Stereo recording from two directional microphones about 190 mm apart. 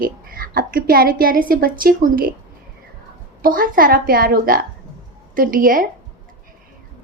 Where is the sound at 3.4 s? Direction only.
45° right (ahead or behind).